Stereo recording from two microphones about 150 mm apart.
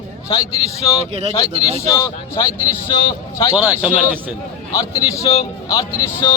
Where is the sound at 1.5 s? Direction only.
45° right (ahead or behind).